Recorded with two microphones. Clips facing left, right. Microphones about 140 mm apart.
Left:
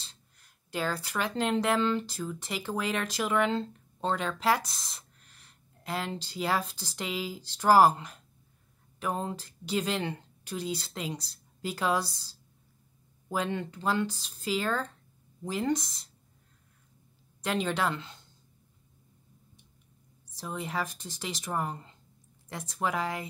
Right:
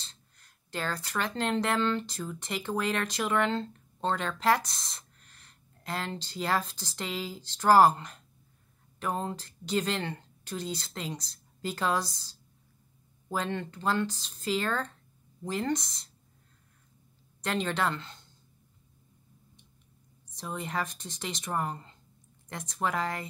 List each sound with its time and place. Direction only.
0.0 s speech: 10° left (ahead or behind)
13.3 s speech: 10° left (ahead or behind)
17.4 s speech: 10° left (ahead or behind)
20.3 s speech: 5° left (ahead or behind)